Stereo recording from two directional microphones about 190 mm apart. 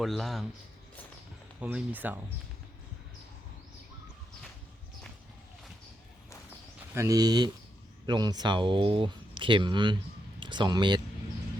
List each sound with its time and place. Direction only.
0.0 s speech: centre (ahead or behind)
1.6 s speech: 10° right (ahead or behind)
6.9 s speech: 15° right (ahead or behind)